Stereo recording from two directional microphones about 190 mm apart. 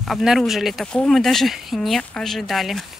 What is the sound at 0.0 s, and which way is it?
Speech, centre (ahead or behind).